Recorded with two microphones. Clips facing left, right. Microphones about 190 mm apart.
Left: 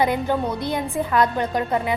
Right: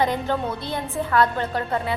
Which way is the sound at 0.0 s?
10° left (ahead or behind).